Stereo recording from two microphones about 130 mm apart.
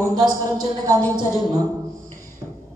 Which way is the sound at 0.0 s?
30° right (ahead or behind).